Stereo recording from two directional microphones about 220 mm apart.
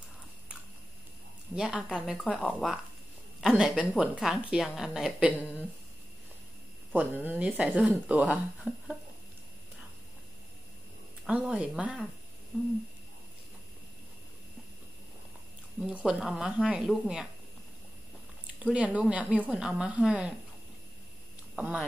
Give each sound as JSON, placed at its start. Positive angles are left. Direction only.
{"t": 1.5, "sound": "a woman's voice", "side_deg": -5}
{"t": 7.2, "sound": "a woman's voice", "side_deg": -5}
{"t": 11.2, "sound": "a woman's voice", "side_deg": -5}
{"t": 15.8, "sound": "a woman's voice", "side_deg": -5}
{"t": 18.6, "sound": "a woman's voice", "side_deg": -5}
{"t": 21.5, "sound": "a woman's voice", "side_deg": -5}